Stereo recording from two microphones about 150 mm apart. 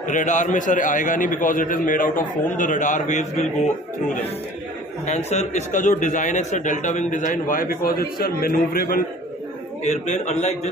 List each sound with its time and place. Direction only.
0.1 s a man's voice: 55° left (ahead or behind)
5.0 s a man's voice: 50° left (ahead or behind); by 9.0 s 75° left (ahead or behind)
9.8 s a man's voice: 50° left (ahead or behind)